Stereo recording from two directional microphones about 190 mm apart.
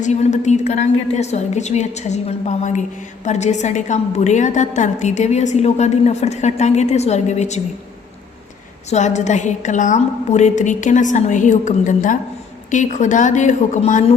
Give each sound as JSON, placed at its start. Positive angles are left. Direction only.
{"t": 0.0, "sound": "a woman's voice", "side_deg": 40}
{"t": 8.9, "sound": "a woman's voice", "side_deg": 40}